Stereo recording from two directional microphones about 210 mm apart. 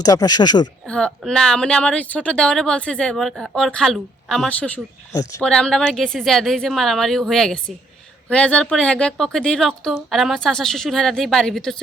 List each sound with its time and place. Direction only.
0.0 s speech: 15° left (ahead or behind)
0.9 s a woman's voice: 5° left (ahead or behind)